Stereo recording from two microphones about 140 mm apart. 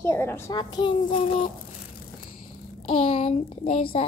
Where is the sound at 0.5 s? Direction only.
35° left (ahead or behind).